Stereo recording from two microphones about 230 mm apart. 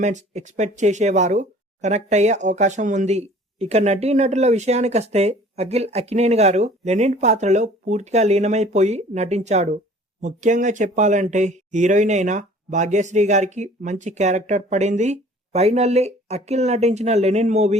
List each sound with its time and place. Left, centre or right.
0.0 s speech: right